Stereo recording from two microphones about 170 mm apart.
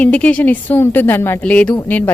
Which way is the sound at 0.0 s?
10° left (ahead or behind).